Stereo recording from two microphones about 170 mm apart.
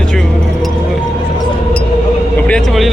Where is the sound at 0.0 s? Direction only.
5° left (ahead or behind).